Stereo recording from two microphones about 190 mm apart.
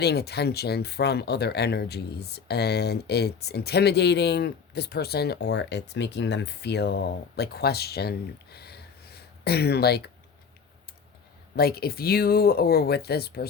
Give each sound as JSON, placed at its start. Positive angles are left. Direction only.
{"t": 0.0, "sound": "speech", "side_deg": 60}
{"t": 11.5, "sound": "speech", "side_deg": 55}